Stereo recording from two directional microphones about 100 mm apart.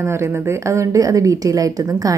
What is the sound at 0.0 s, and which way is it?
A woman's voice, 25° right (ahead or behind).